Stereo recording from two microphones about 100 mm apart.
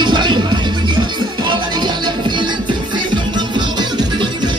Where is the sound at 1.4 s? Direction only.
50° right (ahead or behind).